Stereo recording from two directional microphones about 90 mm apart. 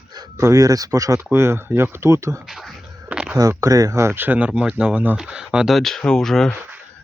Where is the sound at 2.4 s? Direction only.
Centre (ahead or behind).